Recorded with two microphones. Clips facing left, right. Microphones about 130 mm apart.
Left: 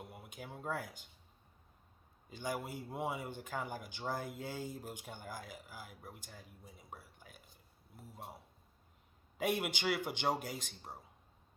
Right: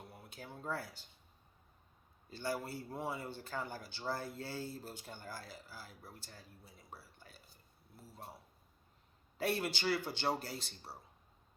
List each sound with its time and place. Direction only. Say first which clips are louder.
0.2 s speech: even; 15° left (ahead or behind)
2.3 s speech: right 1 dB; 15° left (ahead or behind)
6.9 s a sound: left 1 dB; 15° left (ahead or behind)
7.9 s speech: left 2 dB; 15° left (ahead or behind)
9.4 s speech: left 1 dB; 15° left (ahead or behind)